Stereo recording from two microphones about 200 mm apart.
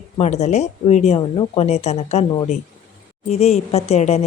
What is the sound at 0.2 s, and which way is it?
Speech, 35° left (ahead or behind).